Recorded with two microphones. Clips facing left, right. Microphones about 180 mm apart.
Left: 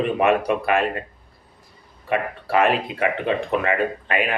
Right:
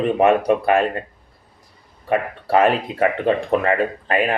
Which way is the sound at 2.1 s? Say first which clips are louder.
Right 4 dB; 35° right (ahead or behind).